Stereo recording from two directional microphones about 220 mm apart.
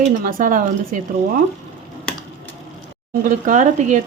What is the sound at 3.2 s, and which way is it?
Speech, 35° right (ahead or behind).